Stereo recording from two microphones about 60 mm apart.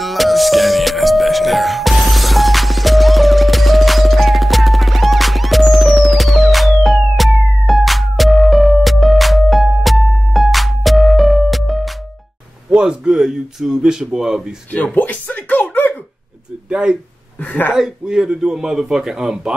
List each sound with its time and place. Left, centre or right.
0.0 s music: centre
12.7 s a man's voice: centre
15.0 s a sound: left
16.6 s speech: centre
17.4 s speech: left
17.7 s a man's voice: centre